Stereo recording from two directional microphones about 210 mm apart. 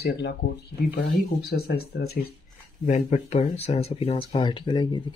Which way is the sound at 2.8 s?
35° left (ahead or behind).